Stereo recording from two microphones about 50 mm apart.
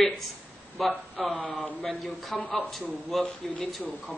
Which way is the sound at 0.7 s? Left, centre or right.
Centre.